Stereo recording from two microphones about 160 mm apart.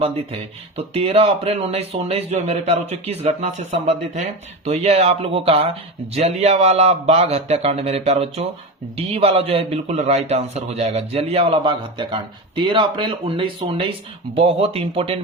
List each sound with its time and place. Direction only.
0.8 s speech: 40° right (ahead or behind)